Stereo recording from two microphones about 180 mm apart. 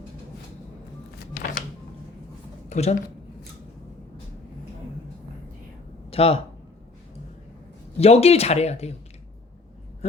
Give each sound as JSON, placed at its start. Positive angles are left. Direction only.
{"t": 1.3, "sound": "a sound", "side_deg": 55}
{"t": 2.6, "sound": "a woman's voice", "side_deg": 40}
{"t": 6.1, "sound": "speech", "side_deg": 35}
{"t": 7.9, "sound": "speech", "side_deg": 35}